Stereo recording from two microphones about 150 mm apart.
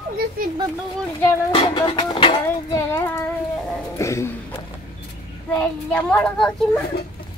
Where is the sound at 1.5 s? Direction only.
35° left (ahead or behind).